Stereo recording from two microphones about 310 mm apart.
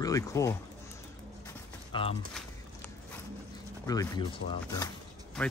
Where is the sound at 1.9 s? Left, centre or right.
Centre.